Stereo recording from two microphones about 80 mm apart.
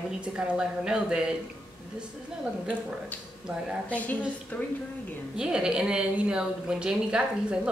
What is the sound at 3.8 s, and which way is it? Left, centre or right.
Speech, centre.